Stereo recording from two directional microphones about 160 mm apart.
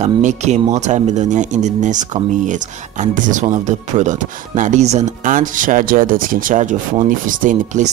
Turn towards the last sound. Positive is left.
turn(degrees=-50)  # may be behind; listen again after turning